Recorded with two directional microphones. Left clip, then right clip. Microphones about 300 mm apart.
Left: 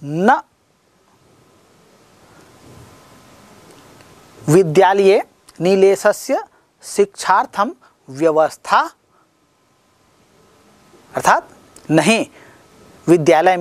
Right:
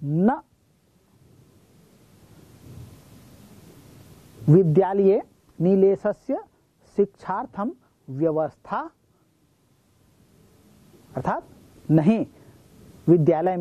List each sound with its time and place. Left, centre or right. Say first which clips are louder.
0.1 s a man's voice: left 10 dB; centre
4.7 s speech: left 8 dB; centre
11.1 s a sound: left 13 dB; centre
13.0 s a man's voice: left 8 dB; centre